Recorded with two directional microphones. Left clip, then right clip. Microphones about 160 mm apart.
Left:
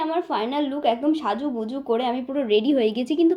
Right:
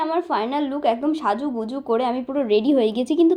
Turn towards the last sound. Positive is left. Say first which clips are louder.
# right 2 dB
turn(degrees=-20)  # may be behind; listen again after turning